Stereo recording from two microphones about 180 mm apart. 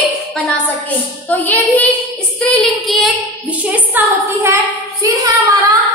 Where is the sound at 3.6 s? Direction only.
10° right (ahead or behind).